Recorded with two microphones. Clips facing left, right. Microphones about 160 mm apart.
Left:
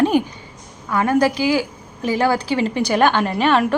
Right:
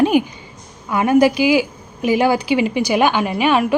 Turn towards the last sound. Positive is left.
turn(degrees=-10)  # may be behind; listen again after turning